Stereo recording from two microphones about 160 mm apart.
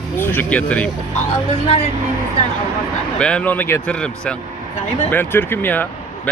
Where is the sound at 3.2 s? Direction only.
5° left (ahead or behind).